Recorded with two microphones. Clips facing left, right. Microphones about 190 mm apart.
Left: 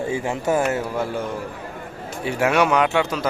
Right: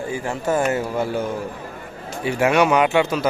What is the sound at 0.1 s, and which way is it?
Speech, 20° left (ahead or behind).